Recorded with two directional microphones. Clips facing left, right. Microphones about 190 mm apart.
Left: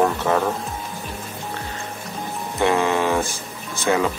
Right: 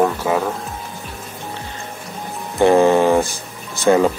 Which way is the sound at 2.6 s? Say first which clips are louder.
Right 7 dB; 35° right (ahead or behind).